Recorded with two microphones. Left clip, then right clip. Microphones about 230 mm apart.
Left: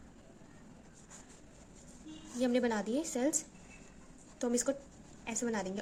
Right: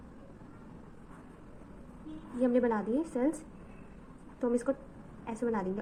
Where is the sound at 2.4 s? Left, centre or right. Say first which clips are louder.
Right 3 dB; left.